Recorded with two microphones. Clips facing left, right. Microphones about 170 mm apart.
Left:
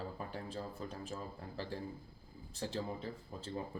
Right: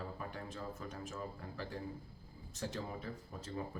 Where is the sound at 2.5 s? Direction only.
30° left (ahead or behind).